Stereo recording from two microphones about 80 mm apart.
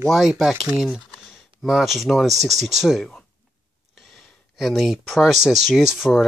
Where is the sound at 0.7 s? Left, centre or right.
Centre.